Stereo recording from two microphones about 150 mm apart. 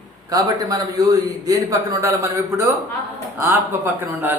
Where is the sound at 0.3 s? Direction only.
25° right (ahead or behind).